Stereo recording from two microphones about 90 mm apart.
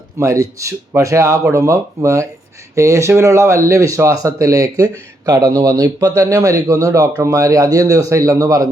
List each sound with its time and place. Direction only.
0.2 s speech: 35° right (ahead or behind)